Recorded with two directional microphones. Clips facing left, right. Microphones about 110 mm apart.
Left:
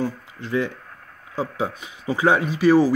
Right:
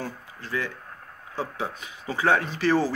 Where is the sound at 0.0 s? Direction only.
20° left (ahead or behind).